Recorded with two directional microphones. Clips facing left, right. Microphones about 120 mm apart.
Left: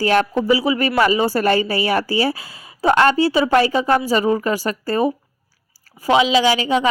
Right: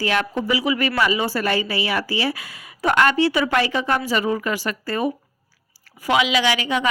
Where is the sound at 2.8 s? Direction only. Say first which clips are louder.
Left 3 dB; 30° left (ahead or behind).